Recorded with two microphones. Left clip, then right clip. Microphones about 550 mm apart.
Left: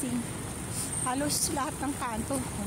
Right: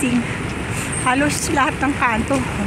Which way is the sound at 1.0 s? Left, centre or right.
Left.